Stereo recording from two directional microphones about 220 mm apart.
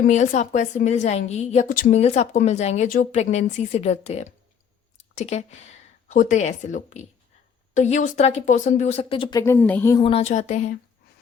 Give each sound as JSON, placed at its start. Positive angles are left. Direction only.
{"t": 0.0, "sound": "a woman's voice", "side_deg": 35}
{"t": 9.4, "sound": "a woman's voice", "side_deg": 10}
{"t": 10.0, "sound": "a woman's voice", "side_deg": 25}